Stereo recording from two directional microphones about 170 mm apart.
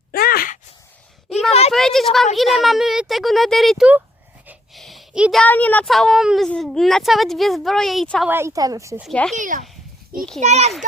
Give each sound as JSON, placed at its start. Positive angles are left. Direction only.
{"t": 0.1, "sound": "groan", "side_deg": 60}
{"t": 1.7, "sound": "a woman's voice", "side_deg": 0}
{"t": 4.4, "sound": "a sound", "side_deg": 0}
{"t": 5.4, "sound": "a woman's voice", "side_deg": 10}
{"t": 8.3, "sound": "a woman's voice", "side_deg": -15}
{"t": 9.3, "sound": "a child's voice", "side_deg": -50}